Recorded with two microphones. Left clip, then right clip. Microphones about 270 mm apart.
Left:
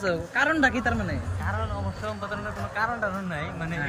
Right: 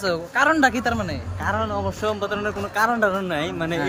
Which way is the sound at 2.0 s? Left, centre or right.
Right.